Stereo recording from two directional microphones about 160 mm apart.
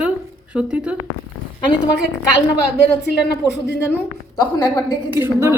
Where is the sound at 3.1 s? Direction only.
90° left.